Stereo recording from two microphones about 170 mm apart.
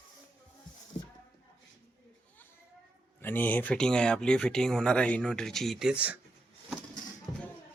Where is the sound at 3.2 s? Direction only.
10° left (ahead or behind); by 6.2 s 5° right (ahead or behind).